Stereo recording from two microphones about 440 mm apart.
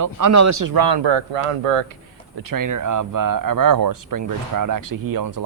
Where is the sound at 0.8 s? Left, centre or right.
Right.